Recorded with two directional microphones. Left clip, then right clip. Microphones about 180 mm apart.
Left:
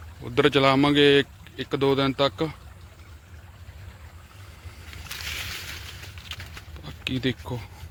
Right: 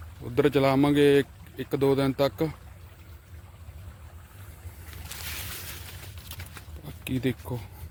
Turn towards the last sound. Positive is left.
turn(degrees=-5)  # may be behind; listen again after turning